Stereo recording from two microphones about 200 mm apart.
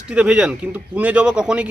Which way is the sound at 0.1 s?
5° right (ahead or behind).